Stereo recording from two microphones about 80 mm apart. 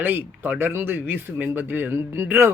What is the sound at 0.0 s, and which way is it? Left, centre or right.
Speech, right.